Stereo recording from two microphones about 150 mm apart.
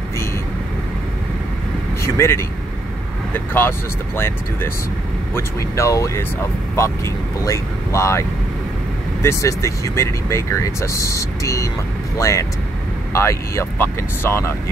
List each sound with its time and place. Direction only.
2.1 s speech: 15° left (ahead or behind)
5.3 s speech: 20° left (ahead or behind)
7.4 s speech: 20° left (ahead or behind)